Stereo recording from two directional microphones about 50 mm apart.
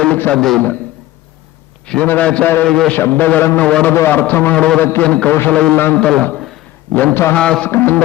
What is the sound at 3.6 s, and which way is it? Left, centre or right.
Speech, left.